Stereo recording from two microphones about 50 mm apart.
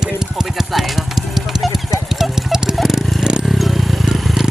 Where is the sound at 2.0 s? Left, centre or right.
Centre.